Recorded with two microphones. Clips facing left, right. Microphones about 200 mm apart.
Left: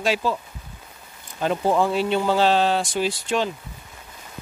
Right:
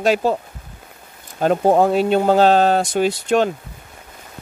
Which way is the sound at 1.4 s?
45° right (ahead or behind).